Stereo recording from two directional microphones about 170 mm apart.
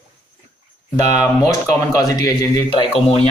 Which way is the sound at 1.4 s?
20° left (ahead or behind).